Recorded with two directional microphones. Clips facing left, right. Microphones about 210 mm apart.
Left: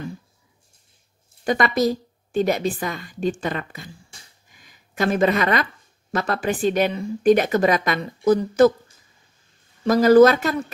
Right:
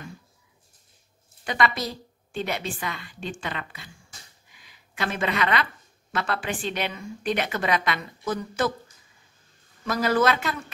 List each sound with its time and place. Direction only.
1.4 s speech: 45° left (ahead or behind)
4.5 s a sound: 45° left (ahead or behind)
6.1 s speech: 40° left (ahead or behind)
9.8 s speech: 40° left (ahead or behind)